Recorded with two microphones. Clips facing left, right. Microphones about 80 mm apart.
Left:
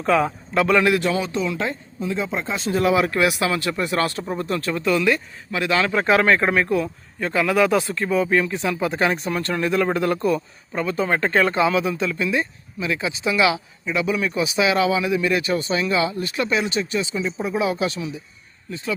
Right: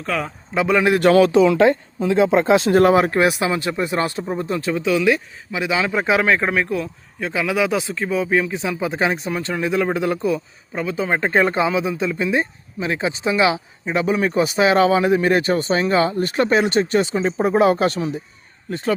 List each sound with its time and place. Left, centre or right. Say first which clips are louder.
0.0 s speech: left 5 dB; centre
0.5 s speech: even; centre
0.9 s speech: right 9 dB; right
2.6 s speech: right 2 dB; right
2.9 s speech: right 3 dB; right; by 11.1 s centre
11.1 s speech: right 3 dB; centre; by 18.9 s right